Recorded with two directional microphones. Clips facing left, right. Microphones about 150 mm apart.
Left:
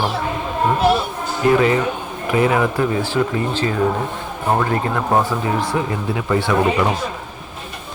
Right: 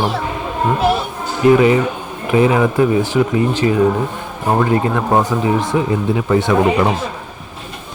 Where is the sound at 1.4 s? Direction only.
20° right (ahead or behind).